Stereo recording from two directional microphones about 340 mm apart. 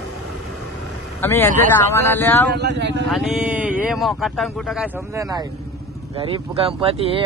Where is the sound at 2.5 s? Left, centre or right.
Right.